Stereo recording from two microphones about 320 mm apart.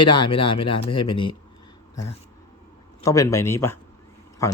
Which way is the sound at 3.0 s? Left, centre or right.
Centre.